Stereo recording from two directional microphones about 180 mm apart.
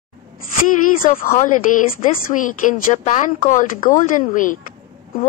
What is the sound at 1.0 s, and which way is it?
A woman's voice, 50° left (ahead or behind).